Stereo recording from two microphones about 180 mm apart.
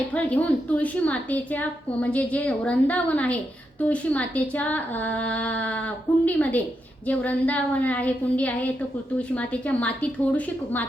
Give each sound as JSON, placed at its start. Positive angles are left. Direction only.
{"t": 0.1, "sound": "a woman's voice", "side_deg": 10}